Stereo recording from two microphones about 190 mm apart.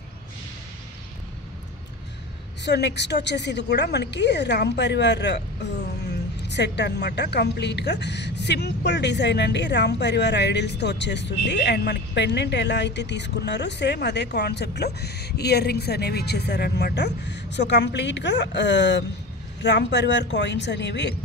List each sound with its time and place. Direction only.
2.6 s a woman's voice: 65° left (ahead or behind)